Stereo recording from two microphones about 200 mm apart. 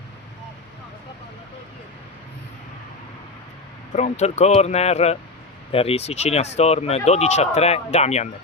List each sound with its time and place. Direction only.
3.9 s speech: 35° left (ahead or behind)